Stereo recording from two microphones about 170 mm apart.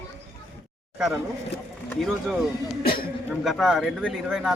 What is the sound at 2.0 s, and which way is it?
A man's voice, centre (ahead or behind).